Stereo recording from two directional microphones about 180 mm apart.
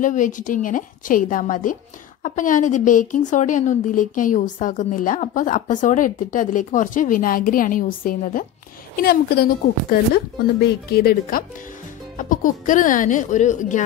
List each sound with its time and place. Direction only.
0.0 s a woman's voice: 45° left (ahead or behind)